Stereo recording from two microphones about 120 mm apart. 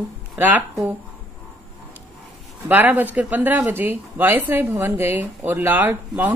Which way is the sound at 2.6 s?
15° right (ahead or behind).